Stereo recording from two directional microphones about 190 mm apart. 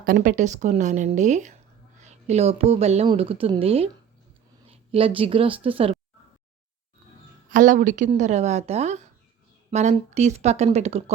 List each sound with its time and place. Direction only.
0.0 s a woman's voice: 45° right (ahead or behind); by 6.0 s 30° right (ahead or behind)
7.5 s a woman's voice: 45° right (ahead or behind)